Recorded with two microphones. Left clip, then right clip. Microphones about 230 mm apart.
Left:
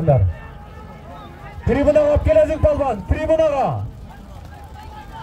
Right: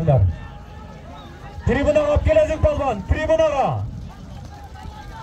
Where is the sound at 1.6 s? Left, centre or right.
Left.